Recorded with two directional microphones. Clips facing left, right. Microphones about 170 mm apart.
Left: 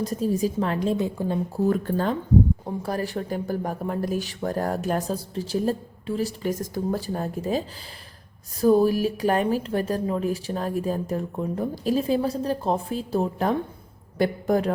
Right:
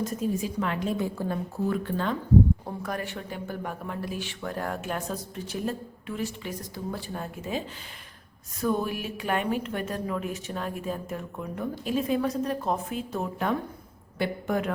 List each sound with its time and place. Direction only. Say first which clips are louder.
0.0 s speech: left 5 dB; 35° left (ahead or behind)
0.9 s a woman's voice: left 4 dB; 20° left (ahead or behind)
1.6 s speech: left 5 dB; 40° left (ahead or behind)
8.6 s speech: left 9 dB; 35° left (ahead or behind)